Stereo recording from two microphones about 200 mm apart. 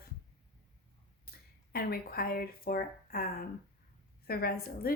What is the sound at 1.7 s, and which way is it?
A woman's voice, 50° left (ahead or behind).